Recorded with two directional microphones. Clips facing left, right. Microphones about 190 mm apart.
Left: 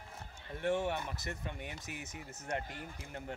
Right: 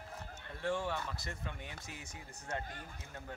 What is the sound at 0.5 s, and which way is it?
Speech, 20° left (ahead or behind).